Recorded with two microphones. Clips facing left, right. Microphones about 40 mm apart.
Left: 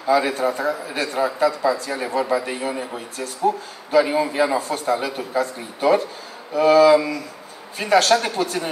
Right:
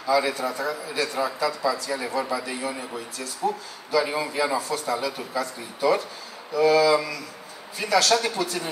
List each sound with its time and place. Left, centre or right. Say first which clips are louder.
0.0 s a man's voice: left 4 dB; left